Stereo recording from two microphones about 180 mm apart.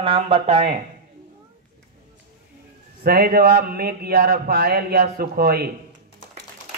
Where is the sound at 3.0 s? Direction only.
55° right (ahead or behind).